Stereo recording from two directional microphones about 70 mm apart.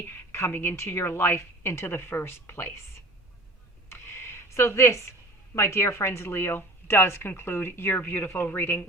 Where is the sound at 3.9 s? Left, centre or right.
Left.